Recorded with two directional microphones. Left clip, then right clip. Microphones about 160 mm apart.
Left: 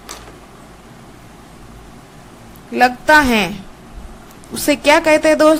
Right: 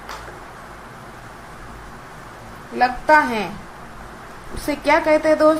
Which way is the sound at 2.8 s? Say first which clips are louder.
Left 4 dB; 70° left (ahead or behind).